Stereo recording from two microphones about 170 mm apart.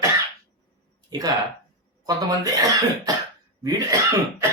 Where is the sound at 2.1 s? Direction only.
20° right (ahead or behind).